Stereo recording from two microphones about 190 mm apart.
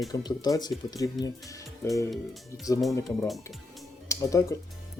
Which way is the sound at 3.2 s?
Centre (ahead or behind).